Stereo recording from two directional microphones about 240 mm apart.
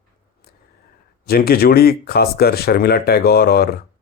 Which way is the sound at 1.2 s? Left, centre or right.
Left.